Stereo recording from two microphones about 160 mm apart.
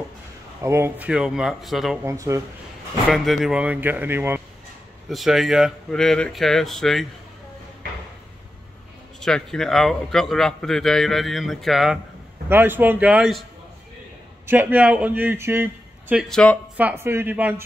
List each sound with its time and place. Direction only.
0.6 s a man's voice: 15° right (ahead or behind); by 2.0 s centre (ahead or behind)
2.0 s speech: 20° right (ahead or behind)
3.1 s speech: centre (ahead or behind)
5.1 s a man's voice: centre (ahead or behind)
9.2 s a man's voice: 5° left (ahead or behind)
12.4 s a man's voice: 15° right (ahead or behind)
16.3 s a man's voice: 5° left (ahead or behind)
16.7 s speech: 10° right (ahead or behind)